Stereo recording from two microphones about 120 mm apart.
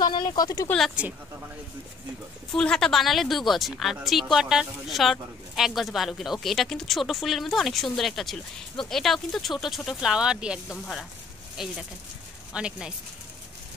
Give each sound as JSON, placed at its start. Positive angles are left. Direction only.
{"t": 0.0, "sound": "speech", "side_deg": 40}
{"t": 1.0, "sound": "speech", "side_deg": -10}
{"t": 2.5, "sound": "speech", "side_deg": 5}